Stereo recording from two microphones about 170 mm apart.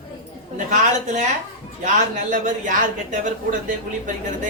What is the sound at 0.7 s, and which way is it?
Speech, 45° right (ahead or behind).